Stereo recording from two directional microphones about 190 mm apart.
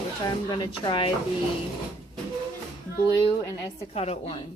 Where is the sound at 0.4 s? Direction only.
25° left (ahead or behind).